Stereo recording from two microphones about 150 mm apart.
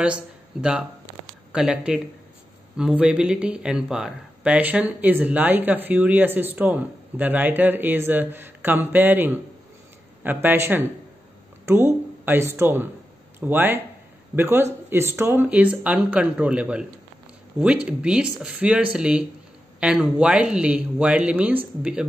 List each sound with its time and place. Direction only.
0.0 s speech: 5° right (ahead or behind)